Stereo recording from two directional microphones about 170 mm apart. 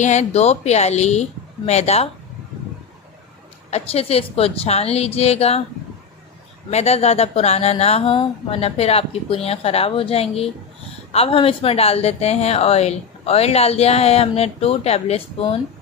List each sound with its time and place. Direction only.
0.0 s a woman's voice: 40° left (ahead or behind)
3.7 s a woman's voice: 35° left (ahead or behind)
6.7 s a woman's voice: 40° left (ahead or behind)